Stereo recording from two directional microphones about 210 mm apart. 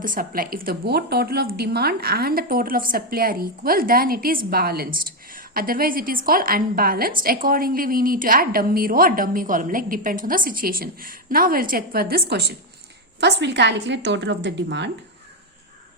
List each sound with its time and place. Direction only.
0.0 s a woman's voice: 40° right (ahead or behind)